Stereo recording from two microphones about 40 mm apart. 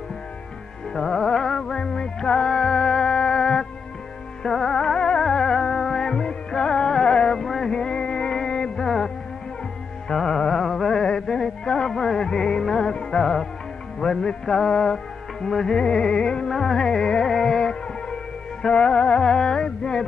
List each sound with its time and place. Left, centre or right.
0.9 s music: centre
7.4 s music: centre
7.7 s music: left
10.1 s music: centre
13.9 s music: centre
16.4 s music: centre
18.6 s music: left